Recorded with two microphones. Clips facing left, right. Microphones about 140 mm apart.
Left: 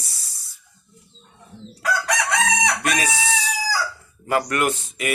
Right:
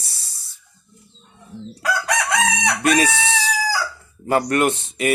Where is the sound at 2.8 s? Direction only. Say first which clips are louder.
Right 6 dB; 30° right (ahead or behind).